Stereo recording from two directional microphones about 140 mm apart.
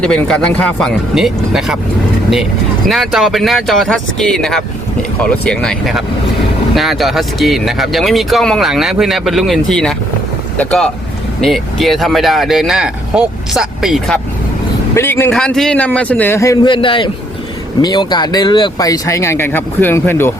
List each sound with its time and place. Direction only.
0.0 s speech: 5° left (ahead or behind)
2.9 s speech: centre (ahead or behind)
14.9 s a man's voice: 15° left (ahead or behind)
15.3 s a man's voice: 5° left (ahead or behind); by 16.6 s 20° left (ahead or behind)
16.6 s a man's voice: 35° left (ahead or behind); by 20.3 s 15° left (ahead or behind)